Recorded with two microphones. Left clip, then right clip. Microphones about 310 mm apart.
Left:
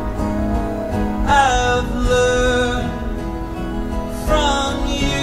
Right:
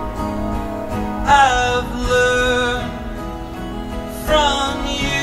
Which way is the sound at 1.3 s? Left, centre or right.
Centre.